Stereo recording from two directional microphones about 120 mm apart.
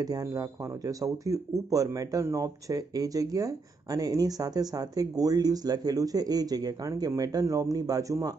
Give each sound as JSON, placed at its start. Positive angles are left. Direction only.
{"t": 0.0, "sound": "speech", "side_deg": -30}